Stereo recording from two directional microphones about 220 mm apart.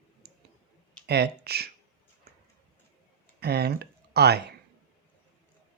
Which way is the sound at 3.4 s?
45° right (ahead or behind).